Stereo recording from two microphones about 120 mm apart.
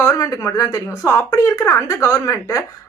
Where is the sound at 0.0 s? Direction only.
25° left (ahead or behind).